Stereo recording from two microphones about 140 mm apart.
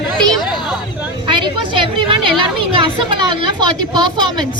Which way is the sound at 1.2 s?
35° right (ahead or behind).